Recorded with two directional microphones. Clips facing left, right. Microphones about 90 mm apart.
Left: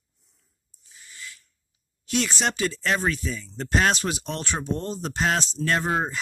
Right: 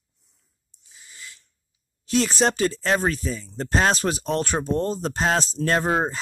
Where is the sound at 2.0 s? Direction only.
35° right (ahead or behind).